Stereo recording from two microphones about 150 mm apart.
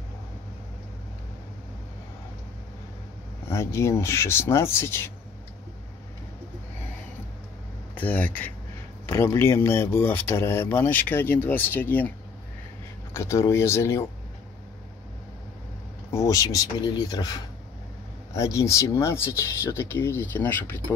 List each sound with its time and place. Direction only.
3.4 s speech: 20° left (ahead or behind)
7.9 s speech: 10° left (ahead or behind)
13.1 s speech: 20° left (ahead or behind)
16.1 s speech: 20° left (ahead or behind)